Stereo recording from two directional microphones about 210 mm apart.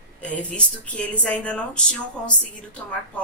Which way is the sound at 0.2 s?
5° left (ahead or behind).